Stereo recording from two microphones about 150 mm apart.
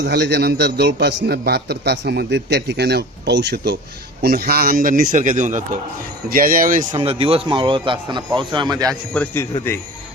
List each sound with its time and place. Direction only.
0.1 s a man's voice: 90° right; by 5.8 s 55° right (ahead or behind)
6.2 s speech: 70° right (ahead or behind)
6.9 s a man's voice: 40° right (ahead or behind)
9.1 s a man's voice: 10° left (ahead or behind)